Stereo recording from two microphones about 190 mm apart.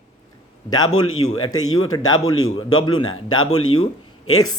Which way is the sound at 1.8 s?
90° left.